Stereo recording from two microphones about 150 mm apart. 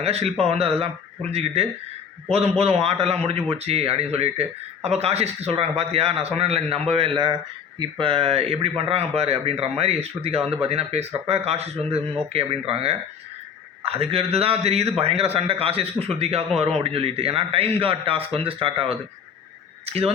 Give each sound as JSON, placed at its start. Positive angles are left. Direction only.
{"t": 0.0, "sound": "speech", "side_deg": -45}